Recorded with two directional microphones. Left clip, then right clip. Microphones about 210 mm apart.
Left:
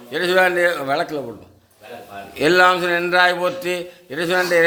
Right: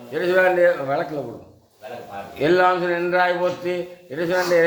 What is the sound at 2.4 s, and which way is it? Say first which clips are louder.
A man's voice: left 3 dB; 45° left (ahead or behind).